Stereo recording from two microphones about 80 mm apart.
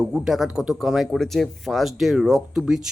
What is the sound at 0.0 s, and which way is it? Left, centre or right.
Speech, centre.